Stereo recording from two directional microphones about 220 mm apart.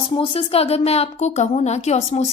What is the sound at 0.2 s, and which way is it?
A woman's voice, 25° left (ahead or behind).